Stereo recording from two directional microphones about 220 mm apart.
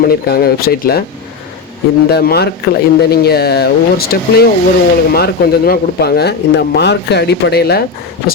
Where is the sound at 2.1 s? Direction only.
45° left (ahead or behind).